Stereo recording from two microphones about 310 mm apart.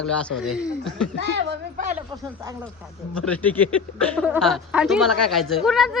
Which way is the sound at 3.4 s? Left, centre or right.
Centre.